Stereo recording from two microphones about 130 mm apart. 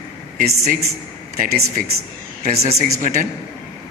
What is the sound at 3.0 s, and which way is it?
Speech, 90° right.